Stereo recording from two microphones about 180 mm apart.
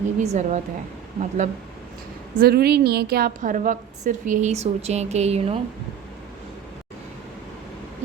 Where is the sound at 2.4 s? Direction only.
60° right (ahead or behind); by 5.5 s 35° right (ahead or behind).